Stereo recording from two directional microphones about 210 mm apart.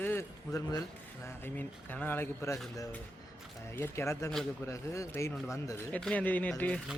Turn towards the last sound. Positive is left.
turn(degrees=5)  # may be behind; listen again after turning